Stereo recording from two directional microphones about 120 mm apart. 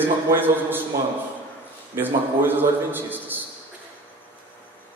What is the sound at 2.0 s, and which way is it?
A man's voice, 15° right (ahead or behind).